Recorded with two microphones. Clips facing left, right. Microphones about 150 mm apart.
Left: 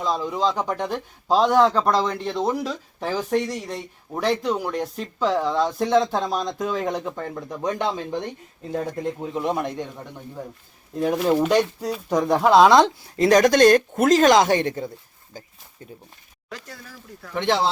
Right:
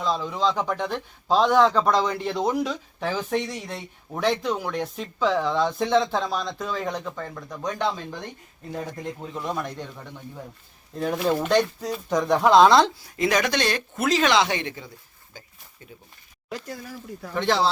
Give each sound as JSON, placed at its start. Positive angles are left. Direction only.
{"t": 0.0, "sound": "speech", "side_deg": 10}
{"t": 13.1, "sound": "speech", "side_deg": 35}
{"t": 16.5, "sound": "speech", "side_deg": -15}
{"t": 17.3, "sound": "speech", "side_deg": 20}